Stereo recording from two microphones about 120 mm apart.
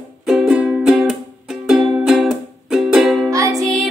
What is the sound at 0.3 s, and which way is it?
Music, 5° right (ahead or behind).